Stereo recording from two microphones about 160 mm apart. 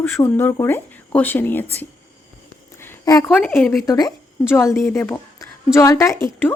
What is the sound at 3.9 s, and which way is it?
A woman's voice, 20° left (ahead or behind).